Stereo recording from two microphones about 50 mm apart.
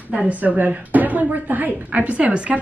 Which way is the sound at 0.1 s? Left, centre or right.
Right.